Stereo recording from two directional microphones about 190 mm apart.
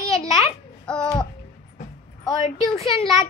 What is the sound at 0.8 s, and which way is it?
Babbling, 5° left (ahead or behind).